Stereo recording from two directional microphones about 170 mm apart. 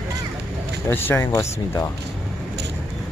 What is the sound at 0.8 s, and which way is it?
Speech, 15° left (ahead or behind).